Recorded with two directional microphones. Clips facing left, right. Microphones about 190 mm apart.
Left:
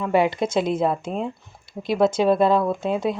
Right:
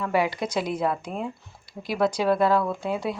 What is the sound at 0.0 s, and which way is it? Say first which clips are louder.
Speech: left 5 dB; 25° left (ahead or behind).